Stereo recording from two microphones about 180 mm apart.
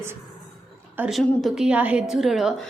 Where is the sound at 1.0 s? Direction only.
Centre (ahead or behind).